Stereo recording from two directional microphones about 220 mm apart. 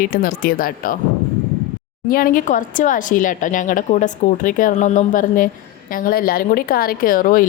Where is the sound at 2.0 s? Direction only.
40° left (ahead or behind).